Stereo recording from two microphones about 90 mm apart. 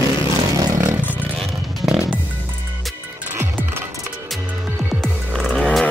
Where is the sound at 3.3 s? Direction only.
25° right (ahead or behind).